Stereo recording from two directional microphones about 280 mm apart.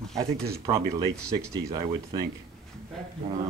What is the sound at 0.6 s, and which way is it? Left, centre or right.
Speech, centre.